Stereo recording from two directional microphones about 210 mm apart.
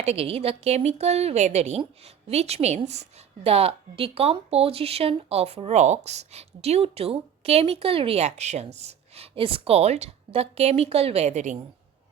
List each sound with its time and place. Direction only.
0.0 s a woman's voice: 30° right (ahead or behind)